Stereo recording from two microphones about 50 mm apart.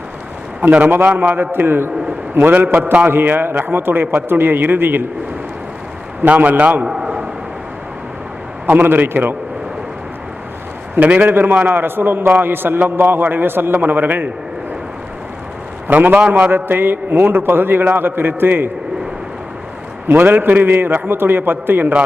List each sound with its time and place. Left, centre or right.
0.6 s a man's voice: right
0.9 s a man's voice: right
6.2 s a man's voice: right
6.8 s a sound: centre
8.6 s a man's voice: right
10.9 s a man's voice: right
15.9 s a man's voice: right
16.6 s a man's voice: right
20.1 s a man's voice: right